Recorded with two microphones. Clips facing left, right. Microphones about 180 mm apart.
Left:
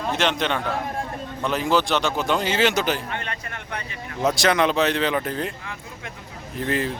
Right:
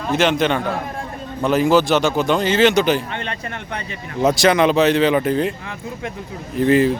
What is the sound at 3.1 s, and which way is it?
Speech, 25° right (ahead or behind).